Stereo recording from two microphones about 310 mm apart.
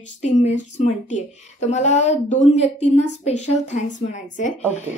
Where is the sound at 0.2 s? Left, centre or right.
Left.